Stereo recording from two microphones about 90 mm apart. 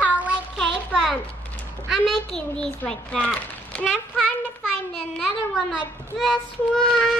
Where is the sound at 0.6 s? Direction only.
Centre (ahead or behind).